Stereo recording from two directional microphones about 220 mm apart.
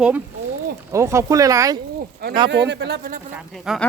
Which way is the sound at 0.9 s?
15° right (ahead or behind).